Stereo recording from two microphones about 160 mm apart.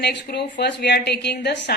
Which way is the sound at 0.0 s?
90° left.